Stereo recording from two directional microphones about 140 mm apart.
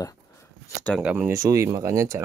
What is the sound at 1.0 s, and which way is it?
Speech, 10° right (ahead or behind).